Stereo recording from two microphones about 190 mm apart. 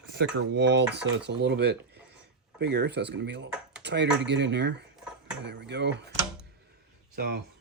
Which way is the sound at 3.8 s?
65° right (ahead or behind).